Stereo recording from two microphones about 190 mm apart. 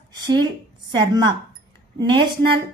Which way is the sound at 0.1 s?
20° right (ahead or behind).